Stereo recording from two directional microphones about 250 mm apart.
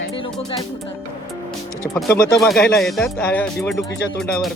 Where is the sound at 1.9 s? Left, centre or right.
Centre.